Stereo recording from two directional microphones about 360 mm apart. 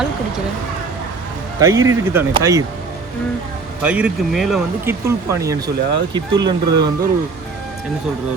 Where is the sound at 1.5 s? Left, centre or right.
Centre.